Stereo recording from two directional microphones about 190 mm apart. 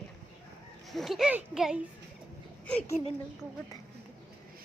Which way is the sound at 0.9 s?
Centre (ahead or behind).